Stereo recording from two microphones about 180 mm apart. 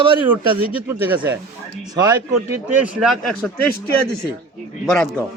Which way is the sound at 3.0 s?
Centre (ahead or behind).